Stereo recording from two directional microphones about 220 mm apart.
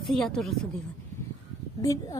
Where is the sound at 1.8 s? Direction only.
15° left (ahead or behind).